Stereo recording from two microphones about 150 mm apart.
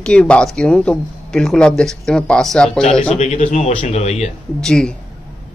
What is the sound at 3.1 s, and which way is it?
Speech, 50° left (ahead or behind).